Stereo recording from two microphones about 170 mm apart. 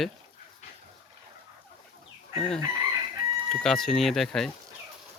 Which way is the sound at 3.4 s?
5° left (ahead or behind).